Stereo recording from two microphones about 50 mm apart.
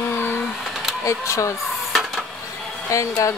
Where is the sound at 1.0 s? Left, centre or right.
Left.